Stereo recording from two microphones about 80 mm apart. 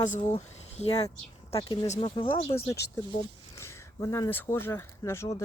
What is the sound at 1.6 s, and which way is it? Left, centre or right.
Speech, left.